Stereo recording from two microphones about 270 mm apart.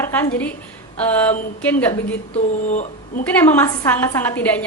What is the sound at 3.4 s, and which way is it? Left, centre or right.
A woman's voice, centre.